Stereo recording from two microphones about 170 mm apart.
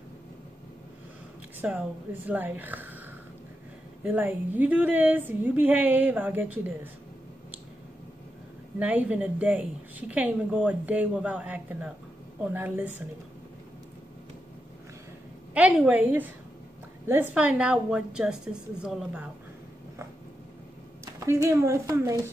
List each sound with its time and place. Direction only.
1.6 s a woman's voice: 5° right (ahead or behind)
4.0 s a woman's voice: 10° right (ahead or behind)
8.7 s a woman's voice: 10° right (ahead or behind)
15.5 s a woman's voice: 10° right (ahead or behind)
21.0 s speech: 15° right (ahead or behind)